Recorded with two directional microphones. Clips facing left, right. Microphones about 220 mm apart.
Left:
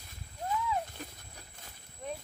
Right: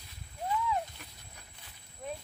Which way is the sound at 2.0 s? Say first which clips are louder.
Even; centre (ahead or behind).